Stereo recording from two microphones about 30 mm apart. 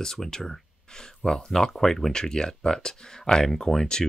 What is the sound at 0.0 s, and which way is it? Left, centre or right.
Speech, left.